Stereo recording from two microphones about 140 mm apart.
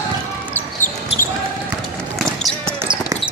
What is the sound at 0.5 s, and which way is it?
Basketball bounce, 15° left (ahead or behind).